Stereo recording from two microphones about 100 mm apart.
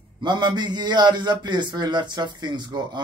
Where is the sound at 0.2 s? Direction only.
50° right (ahead or behind).